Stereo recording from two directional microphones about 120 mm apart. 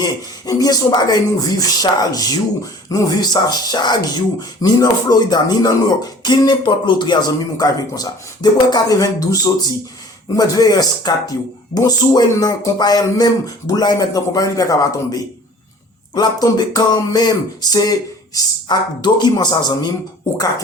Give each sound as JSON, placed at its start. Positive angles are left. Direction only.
{"t": 0.0, "sound": "speech", "side_deg": 30}